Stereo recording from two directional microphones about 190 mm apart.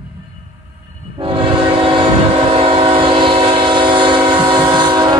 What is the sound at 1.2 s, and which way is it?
Train, 30° right (ahead or behind).